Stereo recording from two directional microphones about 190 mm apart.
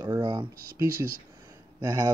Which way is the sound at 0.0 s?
20° right (ahead or behind).